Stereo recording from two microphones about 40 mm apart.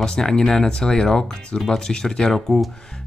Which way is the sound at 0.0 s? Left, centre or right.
Centre.